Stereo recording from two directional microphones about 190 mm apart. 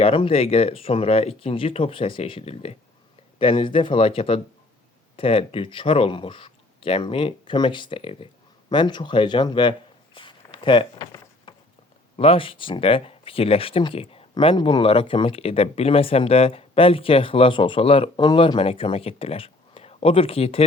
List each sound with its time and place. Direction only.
0.0 s speech: 25° left (ahead or behind)
10.2 s a sound: 25° left (ahead or behind)
12.1 s speech: 30° left (ahead or behind)